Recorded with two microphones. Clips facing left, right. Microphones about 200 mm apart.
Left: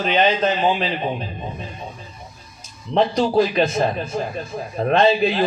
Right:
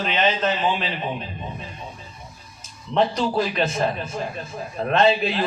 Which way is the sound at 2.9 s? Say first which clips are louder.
Left 4 dB; 35° left (ahead or behind).